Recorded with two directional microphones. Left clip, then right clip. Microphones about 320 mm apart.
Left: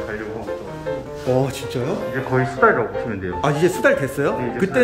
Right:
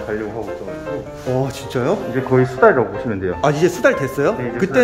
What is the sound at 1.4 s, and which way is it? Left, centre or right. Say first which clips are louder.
Speech: right 2 dB; centre.